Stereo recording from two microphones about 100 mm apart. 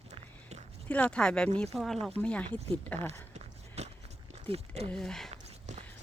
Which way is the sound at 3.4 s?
90° right.